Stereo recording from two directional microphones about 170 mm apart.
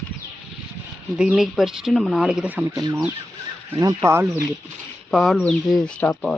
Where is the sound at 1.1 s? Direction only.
5° right (ahead or behind).